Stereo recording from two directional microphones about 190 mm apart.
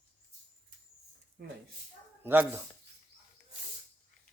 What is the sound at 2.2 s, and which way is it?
Speech, 10° right (ahead or behind).